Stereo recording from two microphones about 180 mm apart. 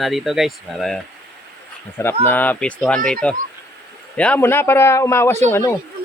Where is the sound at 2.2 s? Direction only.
10° left (ahead or behind).